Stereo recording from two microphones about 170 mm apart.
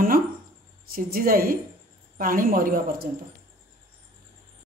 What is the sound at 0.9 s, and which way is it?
A woman's voice, 60° right (ahead or behind).